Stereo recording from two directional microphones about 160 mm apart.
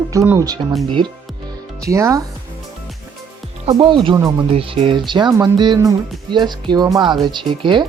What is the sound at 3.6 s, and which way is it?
Speech, 30° right (ahead or behind).